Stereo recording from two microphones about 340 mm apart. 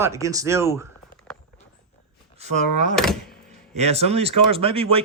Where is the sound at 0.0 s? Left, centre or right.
Centre.